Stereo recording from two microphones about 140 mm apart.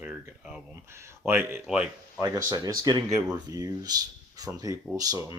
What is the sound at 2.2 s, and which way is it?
Speech, 25° right (ahead or behind).